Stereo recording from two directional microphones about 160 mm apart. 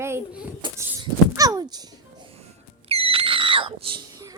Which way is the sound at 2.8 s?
35° right (ahead or behind).